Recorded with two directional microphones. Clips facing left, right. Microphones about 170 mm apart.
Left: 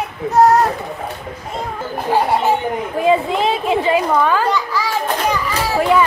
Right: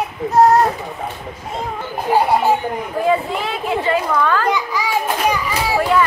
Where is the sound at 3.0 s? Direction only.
20° left (ahead or behind).